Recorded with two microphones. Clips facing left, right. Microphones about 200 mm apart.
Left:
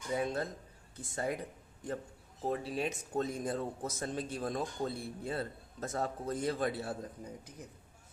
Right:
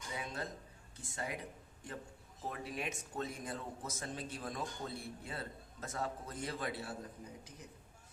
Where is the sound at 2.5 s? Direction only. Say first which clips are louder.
Left 7 dB; 30° left (ahead or behind).